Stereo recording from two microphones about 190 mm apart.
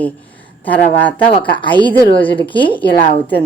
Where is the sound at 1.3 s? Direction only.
25° left (ahead or behind).